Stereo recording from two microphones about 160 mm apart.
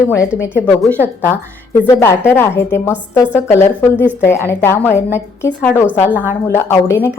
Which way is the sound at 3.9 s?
10° right (ahead or behind).